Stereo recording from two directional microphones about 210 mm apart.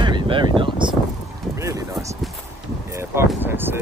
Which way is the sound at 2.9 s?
10° right (ahead or behind).